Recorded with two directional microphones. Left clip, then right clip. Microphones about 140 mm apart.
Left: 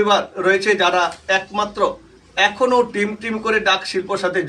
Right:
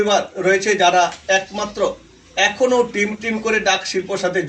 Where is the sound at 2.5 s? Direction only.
15° right (ahead or behind).